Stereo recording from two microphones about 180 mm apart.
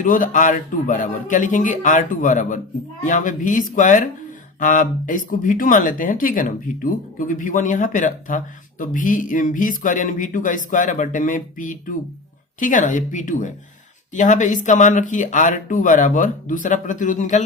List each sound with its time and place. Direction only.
0.0 s speech: 45° left (ahead or behind)